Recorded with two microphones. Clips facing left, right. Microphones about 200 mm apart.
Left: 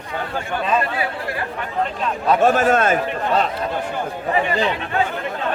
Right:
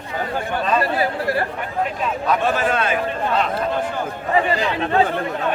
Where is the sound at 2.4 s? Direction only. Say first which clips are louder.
Left 5 dB; 45° left (ahead or behind).